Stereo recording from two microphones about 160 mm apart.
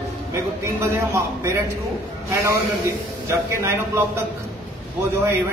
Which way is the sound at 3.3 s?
15° right (ahead or behind).